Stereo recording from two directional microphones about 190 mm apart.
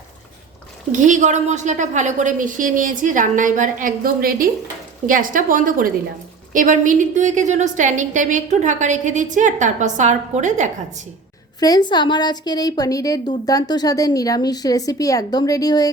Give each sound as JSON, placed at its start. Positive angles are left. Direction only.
{"t": 0.9, "sound": "a woman's voice", "side_deg": -40}
{"t": 11.6, "sound": "a woman's voice", "side_deg": 20}